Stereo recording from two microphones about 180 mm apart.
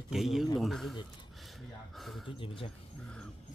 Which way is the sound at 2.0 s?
Centre (ahead or behind).